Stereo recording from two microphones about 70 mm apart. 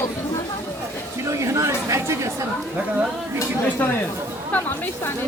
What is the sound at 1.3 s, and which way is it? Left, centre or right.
Speech, right.